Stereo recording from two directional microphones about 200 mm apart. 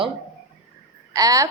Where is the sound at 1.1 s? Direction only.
15° right (ahead or behind).